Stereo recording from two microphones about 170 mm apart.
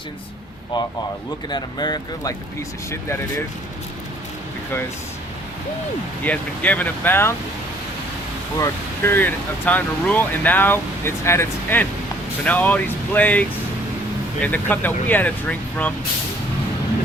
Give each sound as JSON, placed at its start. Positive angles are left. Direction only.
{"t": 1.5, "sound": "speech", "side_deg": 25}
{"t": 6.2, "sound": "speech", "side_deg": 10}
{"t": 8.5, "sound": "speech", "side_deg": 15}